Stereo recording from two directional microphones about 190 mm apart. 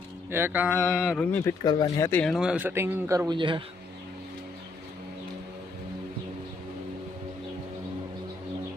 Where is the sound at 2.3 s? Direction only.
5° right (ahead or behind); by 3.6 s 25° right (ahead or behind).